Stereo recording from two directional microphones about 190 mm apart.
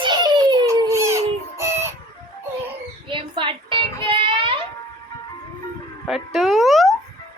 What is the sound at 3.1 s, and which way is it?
Music, 25° right (ahead or behind).